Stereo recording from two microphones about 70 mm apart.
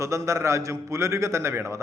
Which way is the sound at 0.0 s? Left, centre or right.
Right.